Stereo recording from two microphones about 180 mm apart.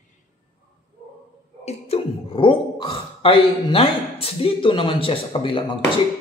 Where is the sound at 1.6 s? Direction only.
30° left (ahead or behind).